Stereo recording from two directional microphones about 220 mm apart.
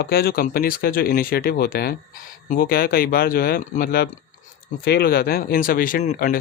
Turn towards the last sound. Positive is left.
turn(degrees=40)  # may be behind; listen again after turning